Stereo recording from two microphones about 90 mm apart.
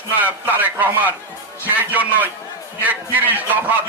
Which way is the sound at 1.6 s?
20° right (ahead or behind).